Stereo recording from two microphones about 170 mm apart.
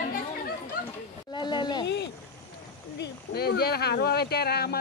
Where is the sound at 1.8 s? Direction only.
90° left.